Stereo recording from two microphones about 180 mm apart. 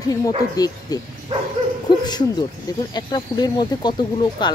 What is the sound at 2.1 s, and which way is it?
Speech, 25° left (ahead or behind).